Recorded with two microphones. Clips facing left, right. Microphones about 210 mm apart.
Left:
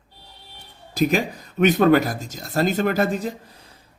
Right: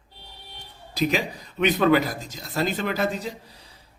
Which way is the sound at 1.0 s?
45° left (ahead or behind).